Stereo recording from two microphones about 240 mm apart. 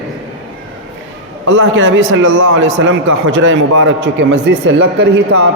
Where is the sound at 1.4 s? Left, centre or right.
Right.